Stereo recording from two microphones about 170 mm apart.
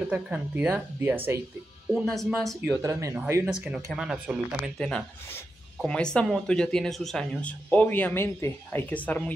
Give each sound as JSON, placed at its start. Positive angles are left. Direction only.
{"t": 0.1, "sound": "speech", "side_deg": -10}
{"t": 2.0, "sound": "speech", "side_deg": 0}
{"t": 2.8, "sound": "speech", "side_deg": -15}